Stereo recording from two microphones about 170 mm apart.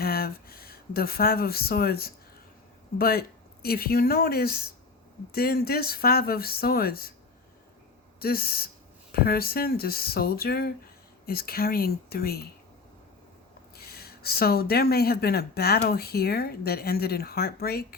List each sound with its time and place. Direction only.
0.0 s speech: 65° left (ahead or behind)
8.2 s speech: 60° left (ahead or behind)
13.7 s speech: 65° left (ahead or behind)